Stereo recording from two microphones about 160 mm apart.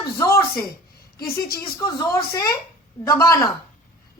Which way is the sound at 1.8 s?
20° left (ahead or behind).